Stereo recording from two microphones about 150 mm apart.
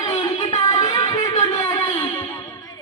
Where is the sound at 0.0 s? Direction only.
35° left (ahead or behind).